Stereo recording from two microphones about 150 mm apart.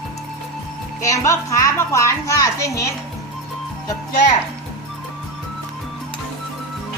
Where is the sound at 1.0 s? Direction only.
20° left (ahead or behind).